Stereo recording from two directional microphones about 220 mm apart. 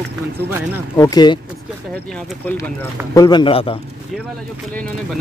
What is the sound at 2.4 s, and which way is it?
Speech, 10° left (ahead or behind).